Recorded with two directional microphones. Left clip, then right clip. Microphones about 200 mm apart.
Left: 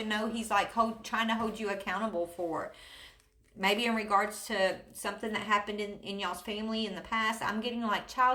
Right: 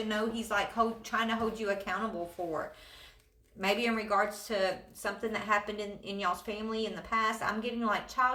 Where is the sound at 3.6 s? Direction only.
35° left (ahead or behind).